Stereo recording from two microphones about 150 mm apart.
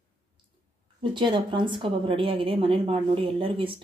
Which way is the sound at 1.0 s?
35° right (ahead or behind).